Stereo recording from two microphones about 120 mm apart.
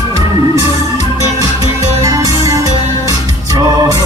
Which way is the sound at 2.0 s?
30° right (ahead or behind).